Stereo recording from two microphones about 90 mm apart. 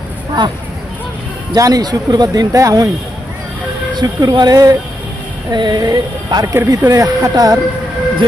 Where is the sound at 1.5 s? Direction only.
45° right (ahead or behind).